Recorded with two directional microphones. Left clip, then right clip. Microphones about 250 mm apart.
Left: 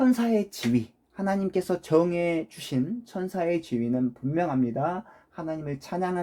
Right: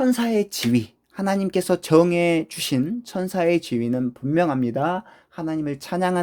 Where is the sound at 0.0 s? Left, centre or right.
Right.